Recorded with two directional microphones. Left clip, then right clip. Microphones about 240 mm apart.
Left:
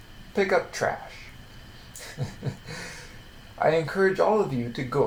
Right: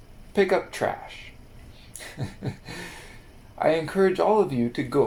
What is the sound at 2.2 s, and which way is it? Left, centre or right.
Speech, right.